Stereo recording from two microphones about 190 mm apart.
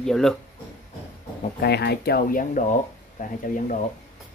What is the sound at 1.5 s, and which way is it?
Speech, 60° left (ahead or behind).